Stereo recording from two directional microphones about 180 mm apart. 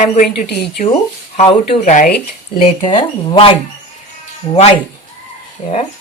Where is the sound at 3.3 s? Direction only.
30° left (ahead or behind).